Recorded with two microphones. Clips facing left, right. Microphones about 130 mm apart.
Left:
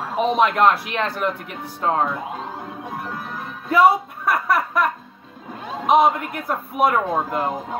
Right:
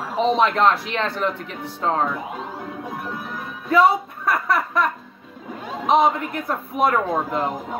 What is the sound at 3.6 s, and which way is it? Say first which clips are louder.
Speech: left 1 dB; 5° left (ahead or behind).